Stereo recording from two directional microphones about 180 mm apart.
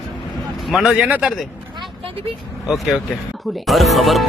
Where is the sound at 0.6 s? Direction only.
Centre (ahead or behind).